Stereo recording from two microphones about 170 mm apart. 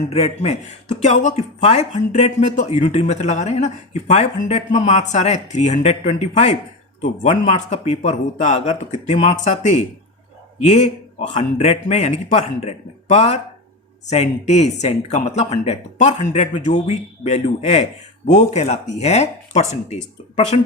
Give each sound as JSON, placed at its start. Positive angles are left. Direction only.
{"t": 0.1, "sound": "speech", "side_deg": 40}